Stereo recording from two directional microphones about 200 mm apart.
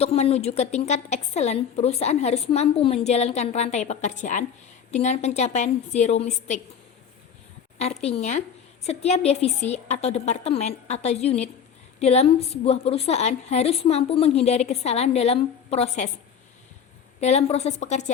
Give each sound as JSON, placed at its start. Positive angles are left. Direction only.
{"t": 0.0, "sound": "a woman's voice", "side_deg": 30}
{"t": 8.0, "sound": "a woman's voice", "side_deg": 35}
{"t": 17.2, "sound": "a woman's voice", "side_deg": 35}